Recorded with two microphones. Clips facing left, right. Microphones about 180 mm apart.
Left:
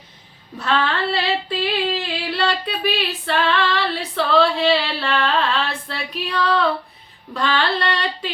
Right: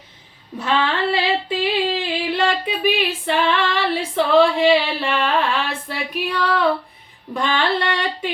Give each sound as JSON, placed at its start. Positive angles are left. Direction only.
{"t": 0.6, "sound": "female singing", "side_deg": -15}
{"t": 2.3, "sound": "a sound", "side_deg": -15}
{"t": 3.2, "sound": "female singing", "side_deg": -15}